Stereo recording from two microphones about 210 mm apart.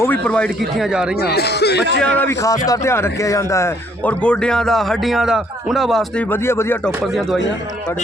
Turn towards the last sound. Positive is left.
turn(degrees=10)  # may be behind; listen again after turning